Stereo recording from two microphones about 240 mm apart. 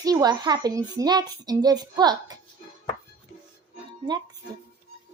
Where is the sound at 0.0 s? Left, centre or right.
Centre.